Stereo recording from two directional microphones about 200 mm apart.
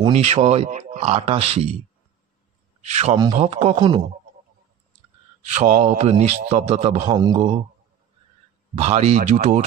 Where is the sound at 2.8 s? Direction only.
35° right (ahead or behind).